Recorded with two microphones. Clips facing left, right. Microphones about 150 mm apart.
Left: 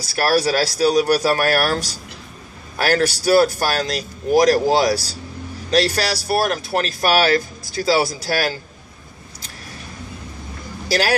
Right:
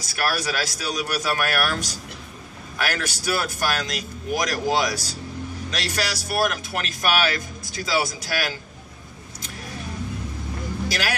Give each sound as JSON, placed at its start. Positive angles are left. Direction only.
{"t": 0.0, "sound": "speech", "side_deg": 35}
{"t": 10.9, "sound": "speech", "side_deg": 35}